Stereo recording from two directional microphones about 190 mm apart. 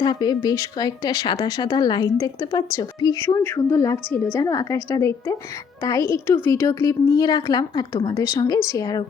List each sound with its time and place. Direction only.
0.0 s a woman's voice: 20° left (ahead or behind)